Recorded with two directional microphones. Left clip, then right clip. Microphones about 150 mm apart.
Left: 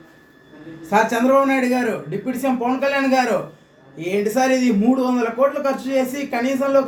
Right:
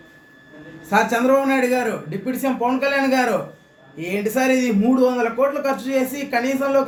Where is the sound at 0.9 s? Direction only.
15° right (ahead or behind).